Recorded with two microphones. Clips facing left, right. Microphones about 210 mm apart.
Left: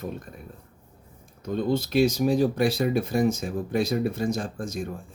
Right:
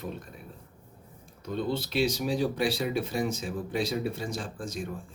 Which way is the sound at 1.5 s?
45° left (ahead or behind).